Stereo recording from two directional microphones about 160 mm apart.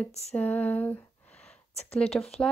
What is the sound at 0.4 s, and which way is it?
A woman's voice, 10° left (ahead or behind).